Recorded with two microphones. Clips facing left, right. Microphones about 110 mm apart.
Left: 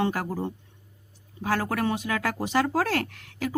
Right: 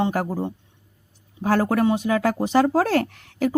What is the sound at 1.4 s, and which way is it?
Speech, 35° right (ahead or behind).